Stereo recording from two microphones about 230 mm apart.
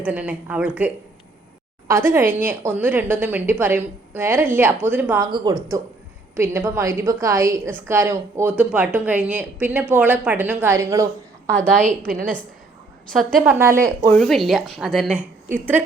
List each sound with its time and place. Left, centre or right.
0.0 s a woman's voice: centre
11.4 s a woman's voice: centre
11.8 s a woman's voice: right
13.4 s a woman's voice: centre
14.1 s a woman's voice: centre